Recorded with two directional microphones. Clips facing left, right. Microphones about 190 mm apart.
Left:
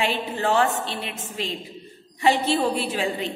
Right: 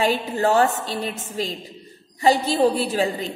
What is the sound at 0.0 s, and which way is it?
A woman's voice, 40° right (ahead or behind).